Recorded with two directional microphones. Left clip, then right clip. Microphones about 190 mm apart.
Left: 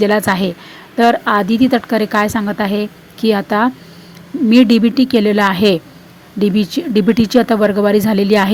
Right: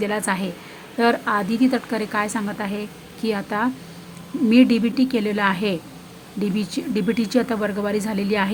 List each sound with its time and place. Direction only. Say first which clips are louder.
0.0 s a woman's voice: left 10 dB; 25° left (ahead or behind)